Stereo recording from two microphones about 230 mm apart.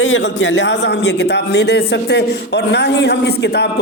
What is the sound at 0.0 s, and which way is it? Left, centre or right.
A man's voice, left.